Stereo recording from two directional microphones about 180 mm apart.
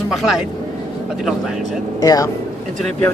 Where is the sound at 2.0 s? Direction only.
20° left (ahead or behind).